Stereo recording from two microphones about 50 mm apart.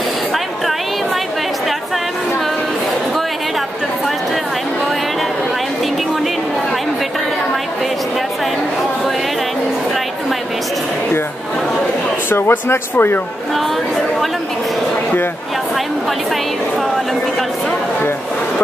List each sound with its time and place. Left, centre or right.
12.3 s speech: left